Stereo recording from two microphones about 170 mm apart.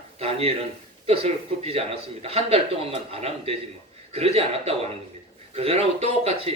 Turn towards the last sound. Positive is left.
turn(degrees=-35)  # may be behind; listen again after turning